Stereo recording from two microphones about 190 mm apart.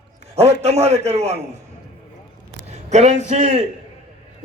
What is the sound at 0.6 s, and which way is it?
Speech, 35° right (ahead or behind).